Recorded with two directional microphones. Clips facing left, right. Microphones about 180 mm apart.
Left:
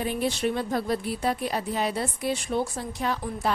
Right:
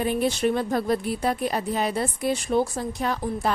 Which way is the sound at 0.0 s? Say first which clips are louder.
Right 4 dB; 50° right (ahead or behind).